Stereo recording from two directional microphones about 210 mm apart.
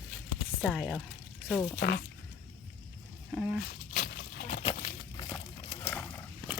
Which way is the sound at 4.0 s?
50° left (ahead or behind).